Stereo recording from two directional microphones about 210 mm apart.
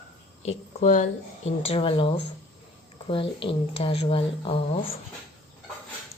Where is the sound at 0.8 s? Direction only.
35° left (ahead or behind).